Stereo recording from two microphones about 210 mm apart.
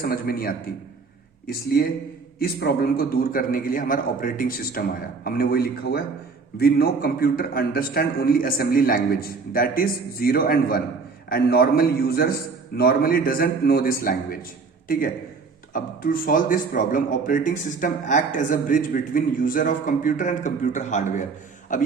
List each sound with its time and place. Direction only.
0.0 s a man's voice: 45° left (ahead or behind)
15.7 s a man's voice: 40° left (ahead or behind)